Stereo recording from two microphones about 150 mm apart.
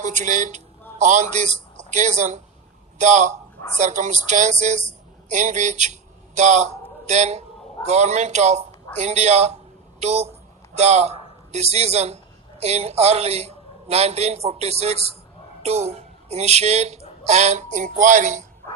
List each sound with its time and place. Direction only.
0.0 s a man's voice: 55° right (ahead or behind)